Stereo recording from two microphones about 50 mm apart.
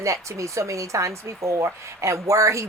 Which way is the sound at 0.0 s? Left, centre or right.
Right.